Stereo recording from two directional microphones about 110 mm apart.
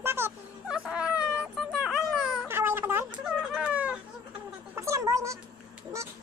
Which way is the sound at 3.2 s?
5° right (ahead or behind).